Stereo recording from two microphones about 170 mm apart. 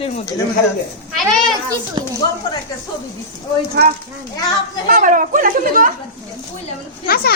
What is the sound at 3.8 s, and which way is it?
Speech, 70° right (ahead or behind).